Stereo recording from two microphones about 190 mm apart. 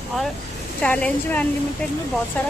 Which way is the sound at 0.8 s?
5° left (ahead or behind).